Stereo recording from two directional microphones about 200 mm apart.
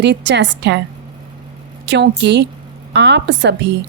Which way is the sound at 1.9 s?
60° right (ahead or behind).